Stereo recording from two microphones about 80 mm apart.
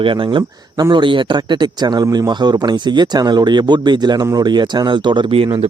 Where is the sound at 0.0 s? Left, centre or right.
Right.